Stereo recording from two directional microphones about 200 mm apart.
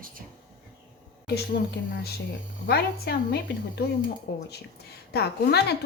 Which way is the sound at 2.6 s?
55° left (ahead or behind).